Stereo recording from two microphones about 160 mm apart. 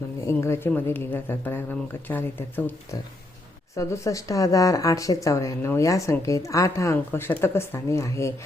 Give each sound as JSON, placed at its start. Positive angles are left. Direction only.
{"t": 0.3, "sound": "speech", "side_deg": 15}